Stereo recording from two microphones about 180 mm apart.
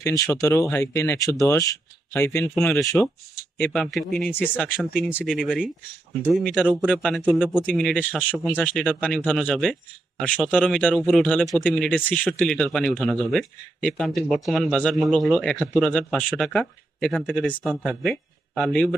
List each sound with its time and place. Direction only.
0.0 s speech: 20° left (ahead or behind)
2.6 s a man's voice: 5° left (ahead or behind)
2.8 s speech: 15° left (ahead or behind)
3.6 s a man's voice: 5° left (ahead or behind)
4.3 s a man's voice: 10° left (ahead or behind)